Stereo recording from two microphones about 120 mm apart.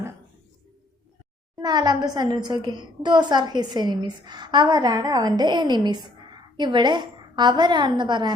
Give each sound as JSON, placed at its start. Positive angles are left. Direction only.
{"t": 1.5, "sound": "a woman's voice", "side_deg": -35}